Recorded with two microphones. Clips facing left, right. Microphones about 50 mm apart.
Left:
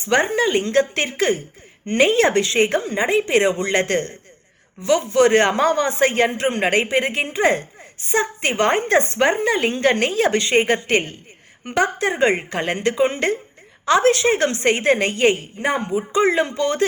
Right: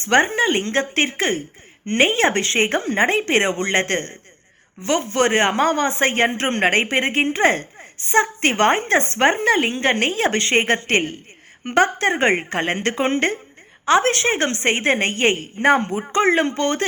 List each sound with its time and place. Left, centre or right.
0.1 s a woman's voice: right
5.3 s speech: right
6.4 s a woman's voice: right
9.6 s a woman's voice: right
15.5 s a man's voice: right